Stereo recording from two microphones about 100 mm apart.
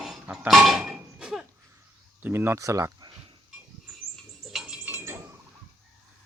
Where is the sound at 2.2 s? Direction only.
25° right (ahead or behind).